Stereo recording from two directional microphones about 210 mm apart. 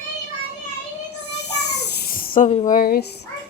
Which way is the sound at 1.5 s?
90° left.